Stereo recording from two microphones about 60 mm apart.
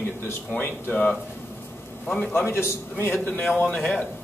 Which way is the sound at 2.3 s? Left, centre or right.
Left.